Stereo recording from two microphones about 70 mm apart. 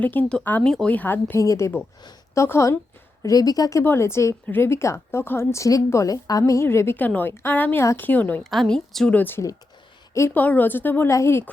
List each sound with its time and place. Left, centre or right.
0.0 s a woman's voice: left
0.6 s a woman's voice: centre
0.9 s a woman's voice: left
1.4 s speech: left
3.2 s speech: left
3.8 s speech: left
7.0 s a woman's voice: left
8.6 s a woman's voice: centre
9.0 s a woman's voice: left
11.1 s speech: left